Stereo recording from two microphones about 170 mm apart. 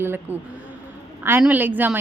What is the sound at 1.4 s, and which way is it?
Speech, 10° right (ahead or behind).